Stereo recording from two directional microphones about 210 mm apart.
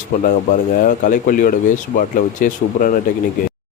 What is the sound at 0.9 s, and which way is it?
Speech, 40° left (ahead or behind).